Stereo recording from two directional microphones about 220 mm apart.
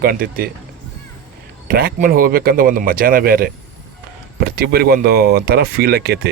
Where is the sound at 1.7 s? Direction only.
45° right (ahead or behind).